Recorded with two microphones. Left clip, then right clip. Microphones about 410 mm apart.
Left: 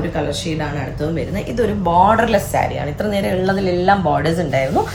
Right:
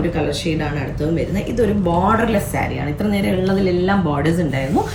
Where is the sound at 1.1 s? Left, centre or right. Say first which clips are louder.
Right 2 dB; centre.